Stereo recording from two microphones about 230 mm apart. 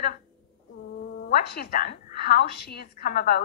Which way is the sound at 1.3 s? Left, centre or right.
Left.